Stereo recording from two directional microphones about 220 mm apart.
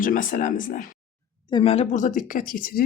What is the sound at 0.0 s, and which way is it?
Speech, 40° left (ahead or behind).